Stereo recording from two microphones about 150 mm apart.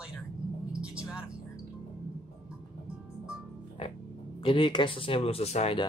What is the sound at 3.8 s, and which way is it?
Music, 40° left (ahead or behind).